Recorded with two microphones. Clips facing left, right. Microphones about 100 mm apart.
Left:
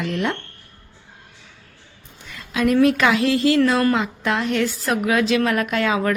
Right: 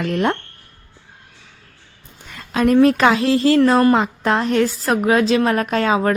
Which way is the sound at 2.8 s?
35° right (ahead or behind).